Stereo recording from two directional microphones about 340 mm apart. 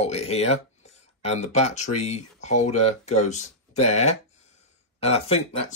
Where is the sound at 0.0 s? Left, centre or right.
Centre.